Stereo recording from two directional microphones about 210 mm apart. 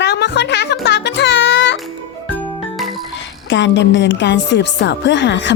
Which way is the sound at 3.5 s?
55° left (ahead or behind).